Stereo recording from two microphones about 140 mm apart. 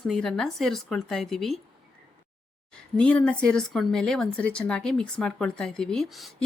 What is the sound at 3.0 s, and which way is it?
A woman's voice, 5° left (ahead or behind).